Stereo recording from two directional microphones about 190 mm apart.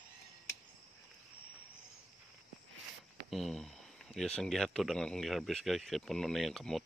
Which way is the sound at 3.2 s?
Centre (ahead or behind).